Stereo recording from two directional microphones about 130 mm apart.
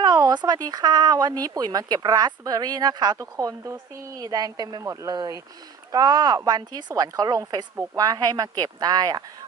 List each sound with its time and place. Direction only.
0.0 s speech: 30° right (ahead or behind)